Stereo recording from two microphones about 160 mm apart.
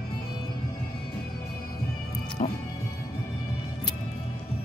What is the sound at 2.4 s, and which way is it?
Speech, 50° left (ahead or behind).